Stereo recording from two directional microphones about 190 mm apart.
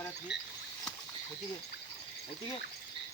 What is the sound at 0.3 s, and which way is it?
Speech, 65° left (ahead or behind).